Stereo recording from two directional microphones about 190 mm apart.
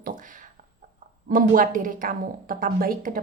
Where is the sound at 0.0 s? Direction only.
45° right (ahead or behind).